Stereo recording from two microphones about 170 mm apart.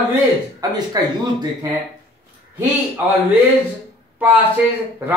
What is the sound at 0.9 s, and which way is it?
Speech, 25° right (ahead or behind).